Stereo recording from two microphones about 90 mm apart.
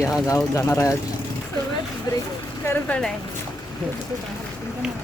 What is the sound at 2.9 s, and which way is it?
Speech, 15° left (ahead or behind).